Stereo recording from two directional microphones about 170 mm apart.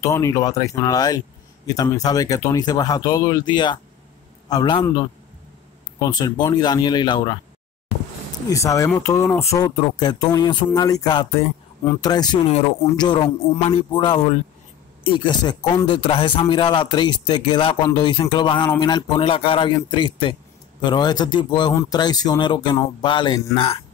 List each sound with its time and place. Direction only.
0.0 s speech: 20° left (ahead or behind)
5.9 s speech: 25° left (ahead or behind)